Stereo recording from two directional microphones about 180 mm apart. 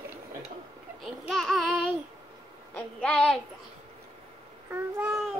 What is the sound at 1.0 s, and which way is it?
Babbling, centre (ahead or behind).